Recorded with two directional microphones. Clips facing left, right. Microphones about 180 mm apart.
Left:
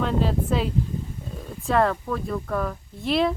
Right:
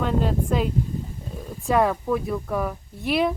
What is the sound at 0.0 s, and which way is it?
Speech, centre (ahead or behind).